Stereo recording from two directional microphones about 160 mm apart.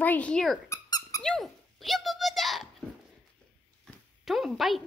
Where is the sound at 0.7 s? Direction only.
20° left (ahead or behind).